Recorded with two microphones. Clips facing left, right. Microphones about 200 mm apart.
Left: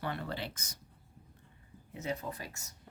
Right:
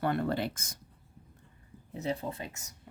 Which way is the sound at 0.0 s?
50° right (ahead or behind).